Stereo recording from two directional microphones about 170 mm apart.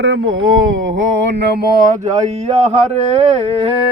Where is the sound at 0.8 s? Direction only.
90° right; by 1.8 s 65° right (ahead or behind).